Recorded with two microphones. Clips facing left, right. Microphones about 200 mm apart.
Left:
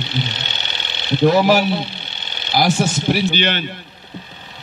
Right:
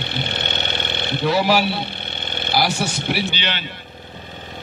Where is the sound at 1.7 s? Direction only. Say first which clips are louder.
Left 4 dB; 55° right (ahead or behind).